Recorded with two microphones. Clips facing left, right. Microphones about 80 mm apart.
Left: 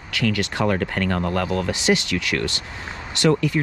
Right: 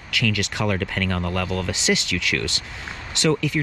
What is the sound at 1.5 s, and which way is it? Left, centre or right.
Speech, left.